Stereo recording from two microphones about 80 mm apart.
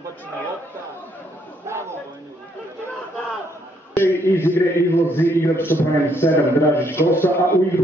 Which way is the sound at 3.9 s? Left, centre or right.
Left.